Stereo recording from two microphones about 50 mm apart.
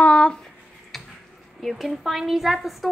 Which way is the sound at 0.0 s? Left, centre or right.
Left.